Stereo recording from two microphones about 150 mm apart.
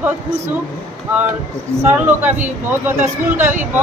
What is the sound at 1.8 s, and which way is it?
A woman's voice, 10° right (ahead or behind).